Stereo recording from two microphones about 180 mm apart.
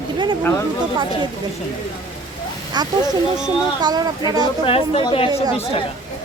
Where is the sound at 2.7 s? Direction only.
25° right (ahead or behind).